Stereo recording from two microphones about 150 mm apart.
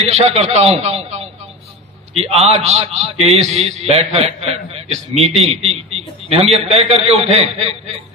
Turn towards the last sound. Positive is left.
turn(degrees=-40)  # may be behind; listen again after turning